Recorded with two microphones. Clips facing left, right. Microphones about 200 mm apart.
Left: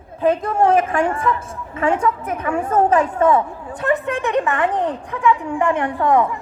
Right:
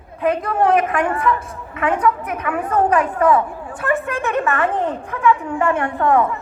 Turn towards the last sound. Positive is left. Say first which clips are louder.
# even
turn(degrees=15)  # may be behind; listen again after turning